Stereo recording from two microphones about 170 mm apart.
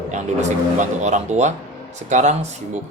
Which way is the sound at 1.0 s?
45° right (ahead or behind).